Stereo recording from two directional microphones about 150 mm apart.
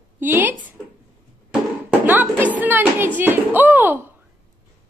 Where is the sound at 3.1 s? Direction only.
10° right (ahead or behind).